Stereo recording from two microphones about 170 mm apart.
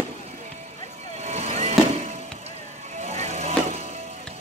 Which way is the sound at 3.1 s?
40° right (ahead or behind).